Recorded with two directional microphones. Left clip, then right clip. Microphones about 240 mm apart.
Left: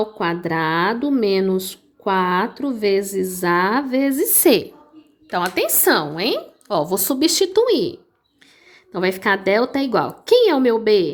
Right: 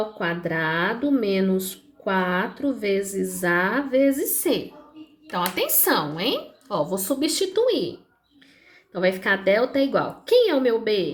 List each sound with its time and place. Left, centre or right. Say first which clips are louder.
0.0 s a woman's voice: left 4 dB; left
8.9 s a woman's voice: left 3 dB; left